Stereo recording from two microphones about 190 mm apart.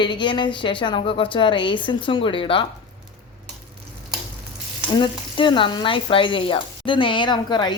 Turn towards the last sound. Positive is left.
turn(degrees=25)  # may be behind; listen again after turning